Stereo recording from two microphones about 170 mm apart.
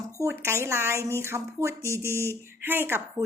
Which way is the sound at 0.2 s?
15° right (ahead or behind).